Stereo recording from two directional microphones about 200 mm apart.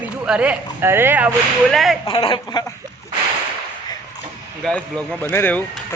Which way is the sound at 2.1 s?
25° left (ahead or behind).